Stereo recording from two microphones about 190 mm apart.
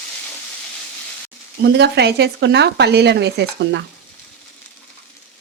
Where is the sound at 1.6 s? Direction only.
60° right (ahead or behind).